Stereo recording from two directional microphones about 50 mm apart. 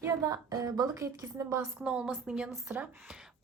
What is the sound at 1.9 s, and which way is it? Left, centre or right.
Speech, centre.